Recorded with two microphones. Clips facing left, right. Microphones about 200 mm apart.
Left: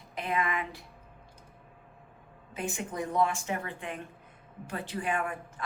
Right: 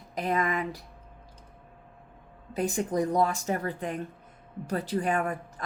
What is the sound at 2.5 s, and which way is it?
Speech, 40° right (ahead or behind).